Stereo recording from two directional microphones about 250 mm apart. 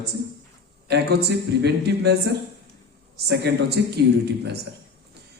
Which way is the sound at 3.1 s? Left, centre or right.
Right.